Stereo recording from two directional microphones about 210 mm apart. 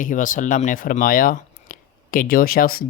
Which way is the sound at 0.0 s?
40° left (ahead or behind).